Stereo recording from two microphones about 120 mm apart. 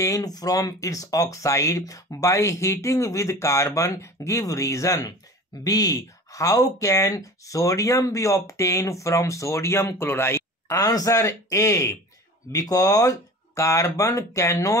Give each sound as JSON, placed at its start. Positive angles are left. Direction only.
{"t": 0.0, "sound": "speech", "side_deg": 30}